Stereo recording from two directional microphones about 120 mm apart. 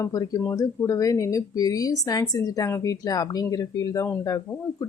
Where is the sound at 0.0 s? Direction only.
30° left (ahead or behind).